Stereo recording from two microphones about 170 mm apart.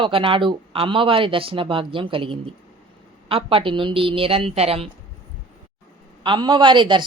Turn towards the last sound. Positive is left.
turn(degrees=-30)  # may be behind; listen again after turning